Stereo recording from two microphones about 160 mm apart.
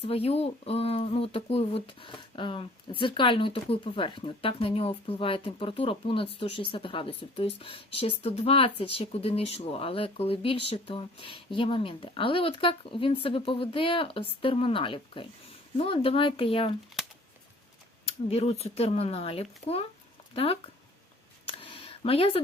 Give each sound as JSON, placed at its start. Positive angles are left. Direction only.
{"t": 0.0, "sound": "speech", "side_deg": 40}
{"t": 18.0, "sound": "speech", "side_deg": 40}
{"t": 21.4, "sound": "a sound", "side_deg": 35}